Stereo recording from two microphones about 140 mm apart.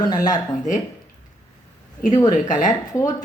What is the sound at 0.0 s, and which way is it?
Speech, 30° left (ahead or behind).